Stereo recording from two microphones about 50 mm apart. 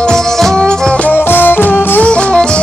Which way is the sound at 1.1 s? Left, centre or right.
Left.